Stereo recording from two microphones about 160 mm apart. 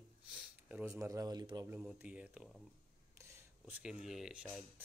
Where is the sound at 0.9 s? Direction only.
20° right (ahead or behind).